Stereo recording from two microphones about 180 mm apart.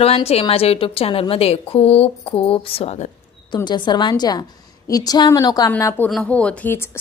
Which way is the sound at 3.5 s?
25° left (ahead or behind).